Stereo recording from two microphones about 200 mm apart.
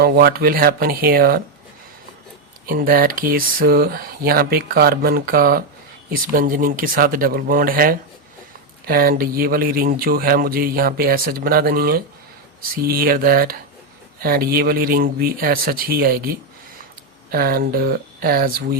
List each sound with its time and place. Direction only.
0.0 s speech: 50° right (ahead or behind)
2.6 s speech: 45° right (ahead or behind)
17.3 s speech: 50° right (ahead or behind)